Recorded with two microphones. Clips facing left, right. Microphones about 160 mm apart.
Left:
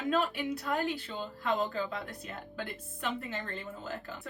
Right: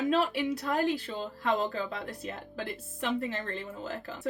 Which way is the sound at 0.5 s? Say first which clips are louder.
Right 3 dB; 35° right (ahead or behind).